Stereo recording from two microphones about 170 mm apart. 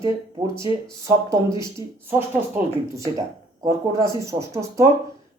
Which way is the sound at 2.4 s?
15° right (ahead or behind).